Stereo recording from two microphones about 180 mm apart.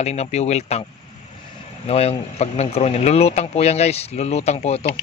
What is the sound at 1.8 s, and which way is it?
Speech, 35° left (ahead or behind).